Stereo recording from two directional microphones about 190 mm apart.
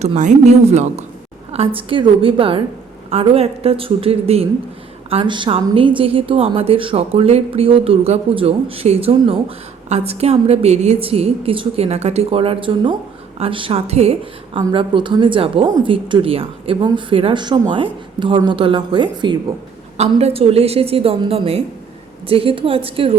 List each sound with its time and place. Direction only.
0.0 s a woman's voice: 40° right (ahead or behind)